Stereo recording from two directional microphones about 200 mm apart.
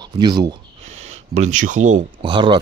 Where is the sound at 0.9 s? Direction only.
35° right (ahead or behind).